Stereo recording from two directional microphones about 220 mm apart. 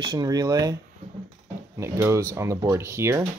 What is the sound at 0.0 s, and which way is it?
Speech, 20° right (ahead or behind).